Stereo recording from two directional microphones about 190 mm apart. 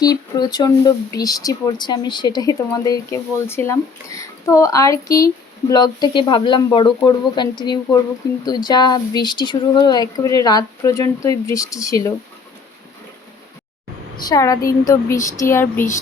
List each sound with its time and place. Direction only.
0.0 s speech: 20° left (ahead or behind)
14.3 s speech: 20° left (ahead or behind)